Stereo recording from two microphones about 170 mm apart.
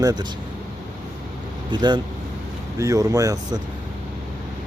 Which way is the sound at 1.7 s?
25° right (ahead or behind).